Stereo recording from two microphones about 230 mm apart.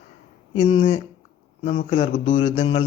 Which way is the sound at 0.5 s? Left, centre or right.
Left.